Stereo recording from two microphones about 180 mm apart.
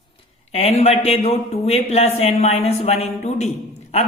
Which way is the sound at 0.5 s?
35° left (ahead or behind).